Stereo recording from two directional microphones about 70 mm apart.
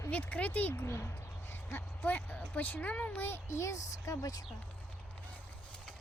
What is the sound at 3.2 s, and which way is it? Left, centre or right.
A child's voice, left.